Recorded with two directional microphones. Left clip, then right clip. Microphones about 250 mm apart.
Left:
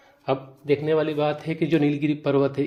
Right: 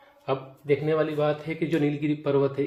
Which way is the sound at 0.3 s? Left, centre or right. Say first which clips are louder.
Left 2 dB; left.